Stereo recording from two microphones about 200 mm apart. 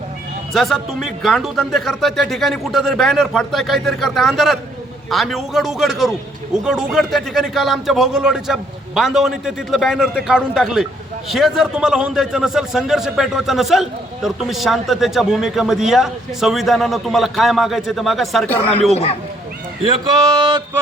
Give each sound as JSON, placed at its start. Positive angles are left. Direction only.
{"t": 0.5, "sound": "a man's voice", "side_deg": 0}
{"t": 19.8, "sound": "speech", "side_deg": -20}